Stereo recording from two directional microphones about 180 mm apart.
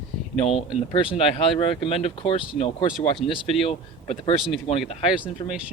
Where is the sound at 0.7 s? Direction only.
30° left (ahead or behind).